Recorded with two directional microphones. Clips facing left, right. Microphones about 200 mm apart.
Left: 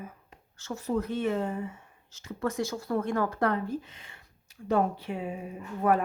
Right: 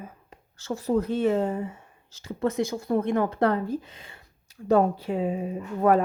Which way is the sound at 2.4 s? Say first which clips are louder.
Right 5 dB; 20° right (ahead or behind).